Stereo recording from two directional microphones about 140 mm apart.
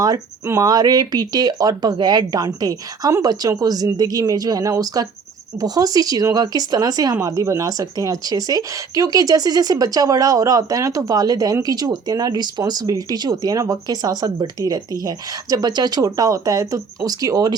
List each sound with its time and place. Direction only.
0.0 s speech: 25° right (ahead or behind)